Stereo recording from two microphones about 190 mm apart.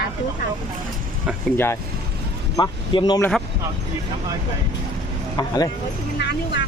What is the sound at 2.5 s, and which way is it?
Speech, 20° left (ahead or behind).